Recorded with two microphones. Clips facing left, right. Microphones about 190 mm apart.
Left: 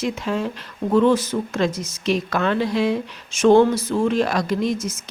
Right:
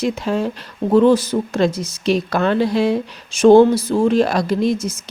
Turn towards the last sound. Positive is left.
turn(degrees=-30)  # may be behind; listen again after turning